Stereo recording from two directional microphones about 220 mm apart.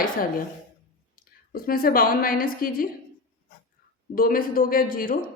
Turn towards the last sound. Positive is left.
turn(degrees=40)  # may be behind; listen again after turning